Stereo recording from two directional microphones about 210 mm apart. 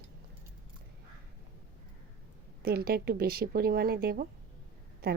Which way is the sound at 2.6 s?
45° right (ahead or behind).